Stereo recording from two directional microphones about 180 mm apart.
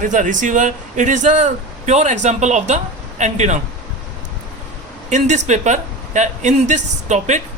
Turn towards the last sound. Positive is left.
turn(degrees=-40)  # may be behind; listen again after turning